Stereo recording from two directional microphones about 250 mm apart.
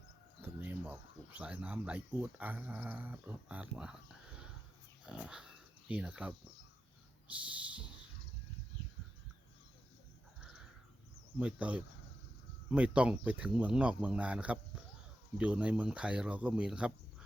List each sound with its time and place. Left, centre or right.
0.4 s speech: centre
5.0 s speech: centre
11.3 s speech: centre